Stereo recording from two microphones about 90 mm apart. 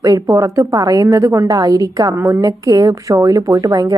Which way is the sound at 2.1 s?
25° right (ahead or behind).